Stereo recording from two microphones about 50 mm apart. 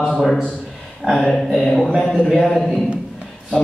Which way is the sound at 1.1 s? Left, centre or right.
Centre.